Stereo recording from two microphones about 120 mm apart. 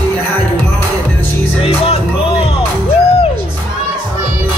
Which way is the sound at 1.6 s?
55° left (ahead or behind).